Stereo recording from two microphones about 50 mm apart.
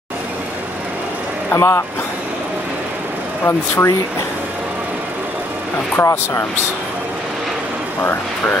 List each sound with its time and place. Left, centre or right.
1.5 s speech: left
3.4 s speech: left
5.9 s speech: left
8.0 s speech: left